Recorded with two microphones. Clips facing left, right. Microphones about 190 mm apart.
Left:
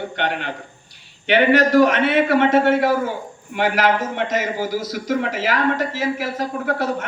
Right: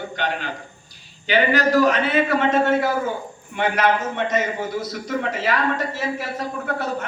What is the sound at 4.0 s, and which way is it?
A man's voice, 90° left.